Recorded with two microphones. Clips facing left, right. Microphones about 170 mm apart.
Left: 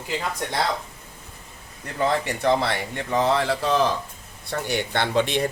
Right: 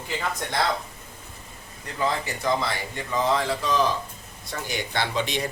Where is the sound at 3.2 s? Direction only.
65° left (ahead or behind).